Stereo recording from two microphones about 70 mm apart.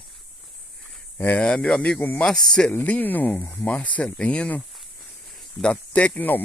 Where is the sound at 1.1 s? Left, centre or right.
Left.